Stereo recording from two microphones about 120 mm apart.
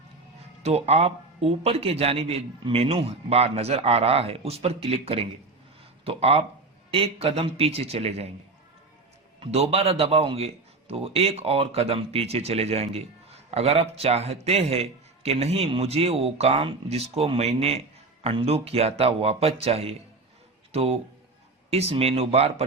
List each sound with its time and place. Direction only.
0.6 s a man's voice: 60° right (ahead or behind)
9.5 s a man's voice: 60° right (ahead or behind)